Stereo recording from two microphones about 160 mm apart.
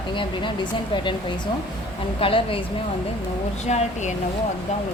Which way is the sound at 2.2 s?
35° left (ahead or behind).